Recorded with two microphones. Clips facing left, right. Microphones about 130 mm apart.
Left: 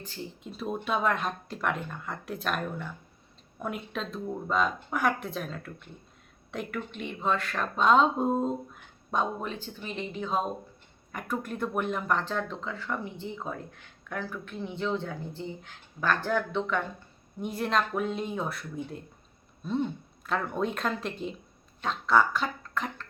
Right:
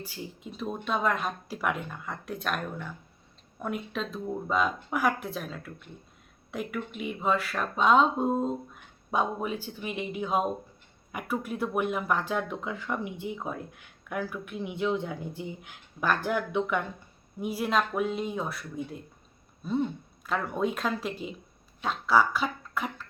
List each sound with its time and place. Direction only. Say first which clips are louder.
0.0 s speech: even; 5° right (ahead or behind)